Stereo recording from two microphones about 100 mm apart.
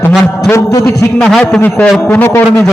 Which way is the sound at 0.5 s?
25° left (ahead or behind).